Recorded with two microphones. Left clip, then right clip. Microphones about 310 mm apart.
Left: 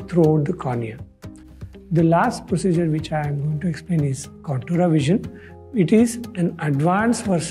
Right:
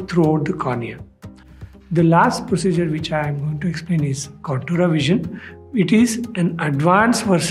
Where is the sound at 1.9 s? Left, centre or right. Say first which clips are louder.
Right 3 dB; left.